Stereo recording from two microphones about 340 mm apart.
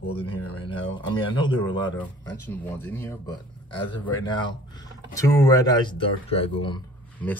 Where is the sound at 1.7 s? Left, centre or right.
Centre.